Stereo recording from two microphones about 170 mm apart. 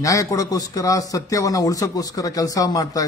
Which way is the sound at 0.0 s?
20° left (ahead or behind).